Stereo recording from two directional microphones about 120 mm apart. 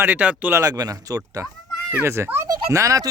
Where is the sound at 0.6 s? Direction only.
30° right (ahead or behind).